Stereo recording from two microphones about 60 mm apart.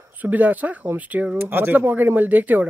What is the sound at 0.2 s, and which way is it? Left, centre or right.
Speech, right.